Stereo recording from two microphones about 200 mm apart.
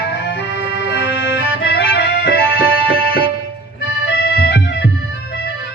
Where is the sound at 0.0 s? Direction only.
60° left (ahead or behind).